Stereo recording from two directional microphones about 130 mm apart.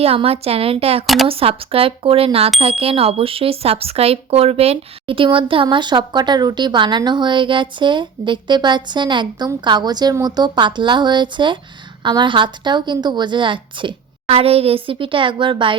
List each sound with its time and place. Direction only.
0.0 s speech: 50° right (ahead or behind)
1.0 s speech: centre (ahead or behind)
1.3 s speech: 45° right (ahead or behind)